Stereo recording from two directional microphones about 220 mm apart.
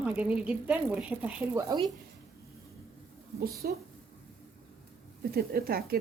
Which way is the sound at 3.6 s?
45° right (ahead or behind).